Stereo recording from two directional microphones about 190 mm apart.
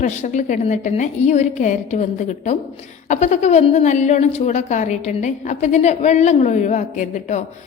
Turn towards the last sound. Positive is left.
turn(degrees=40)  # may be behind; listen again after turning